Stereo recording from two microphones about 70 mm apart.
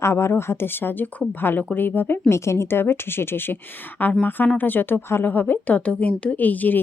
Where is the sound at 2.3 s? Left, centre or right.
Left.